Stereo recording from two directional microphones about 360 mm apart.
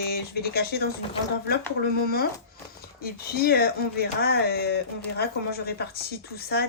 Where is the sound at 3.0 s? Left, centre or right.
Left.